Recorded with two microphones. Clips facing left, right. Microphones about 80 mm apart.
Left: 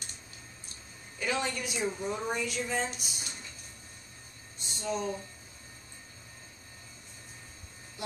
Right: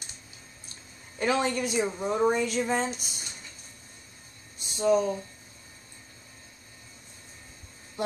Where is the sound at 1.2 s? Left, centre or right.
Right.